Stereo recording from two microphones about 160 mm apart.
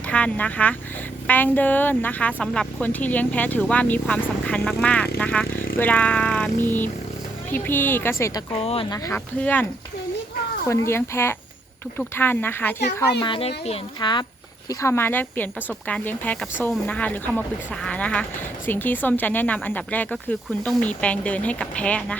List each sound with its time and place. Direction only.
0.1 s a woman's voice: 10° left (ahead or behind)
8.5 s speech: 35° left (ahead or behind)
9.1 s a woman's voice: 10° left (ahead or behind)
10.7 s a woman's voice: 15° left (ahead or behind)
13.1 s speech: 30° left (ahead or behind)
14.7 s a woman's voice: 20° left (ahead or behind)